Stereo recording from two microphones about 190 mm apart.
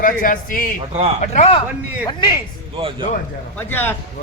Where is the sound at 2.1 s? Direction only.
20° left (ahead or behind).